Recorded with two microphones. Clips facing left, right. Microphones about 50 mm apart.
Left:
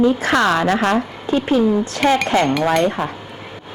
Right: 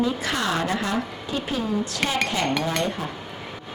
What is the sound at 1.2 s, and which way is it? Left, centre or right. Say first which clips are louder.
Speech: left 11 dB; left.